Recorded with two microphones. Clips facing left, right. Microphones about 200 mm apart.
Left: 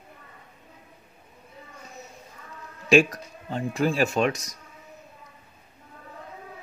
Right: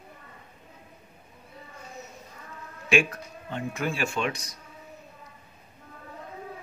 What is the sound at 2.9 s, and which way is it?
Speech, 40° left (ahead or behind).